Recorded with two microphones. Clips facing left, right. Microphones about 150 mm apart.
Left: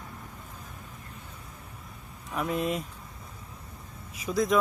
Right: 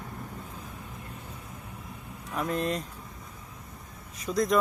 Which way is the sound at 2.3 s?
5° left (ahead or behind).